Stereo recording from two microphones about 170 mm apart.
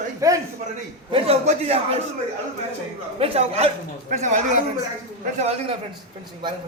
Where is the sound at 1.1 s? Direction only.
35° right (ahead or behind).